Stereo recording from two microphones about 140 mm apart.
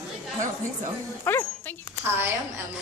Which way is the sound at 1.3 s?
15° left (ahead or behind).